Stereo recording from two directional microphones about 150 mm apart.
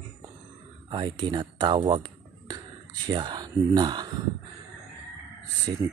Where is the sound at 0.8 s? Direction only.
35° right (ahead or behind).